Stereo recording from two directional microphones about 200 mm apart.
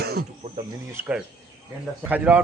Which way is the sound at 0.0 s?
55° right (ahead or behind).